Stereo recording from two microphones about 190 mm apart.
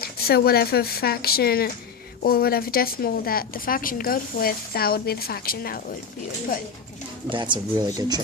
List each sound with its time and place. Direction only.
0.0 s a woman's voice: 55° left (ahead or behind)
7.3 s speech: 25° right (ahead or behind)